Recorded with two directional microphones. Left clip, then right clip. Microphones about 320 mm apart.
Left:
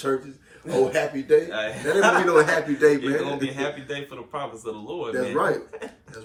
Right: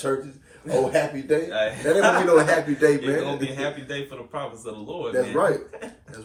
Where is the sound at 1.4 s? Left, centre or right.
Centre.